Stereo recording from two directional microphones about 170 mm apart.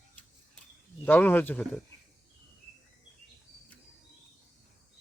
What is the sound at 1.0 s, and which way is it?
Speech, 10° left (ahead or behind).